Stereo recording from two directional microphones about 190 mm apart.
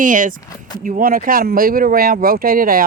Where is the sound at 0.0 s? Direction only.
45° right (ahead or behind).